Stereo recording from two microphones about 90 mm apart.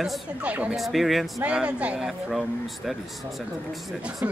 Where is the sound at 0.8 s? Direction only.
Centre (ahead or behind).